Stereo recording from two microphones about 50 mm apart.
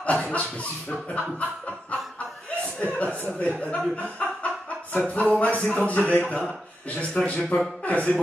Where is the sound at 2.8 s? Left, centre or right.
Left.